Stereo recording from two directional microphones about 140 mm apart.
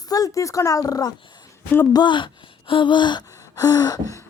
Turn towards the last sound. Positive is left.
turn(degrees=25)  # may be behind; listen again after turning